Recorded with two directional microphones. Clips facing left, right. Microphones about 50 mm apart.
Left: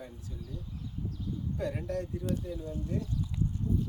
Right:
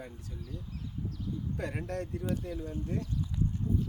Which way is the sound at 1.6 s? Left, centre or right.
Right.